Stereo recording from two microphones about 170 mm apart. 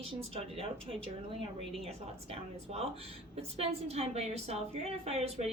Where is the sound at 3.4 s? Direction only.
35° right (ahead or behind).